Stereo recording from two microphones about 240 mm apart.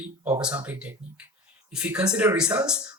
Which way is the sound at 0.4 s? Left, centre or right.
Centre.